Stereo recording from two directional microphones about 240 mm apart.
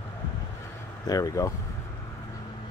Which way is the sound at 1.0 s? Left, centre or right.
Centre.